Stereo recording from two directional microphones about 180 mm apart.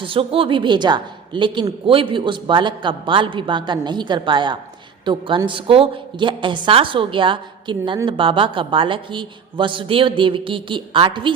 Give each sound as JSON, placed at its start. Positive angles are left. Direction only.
{"t": 0.0, "sound": "a woman's voice", "side_deg": -30}